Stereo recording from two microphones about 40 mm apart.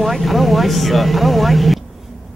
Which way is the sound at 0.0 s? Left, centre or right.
Centre.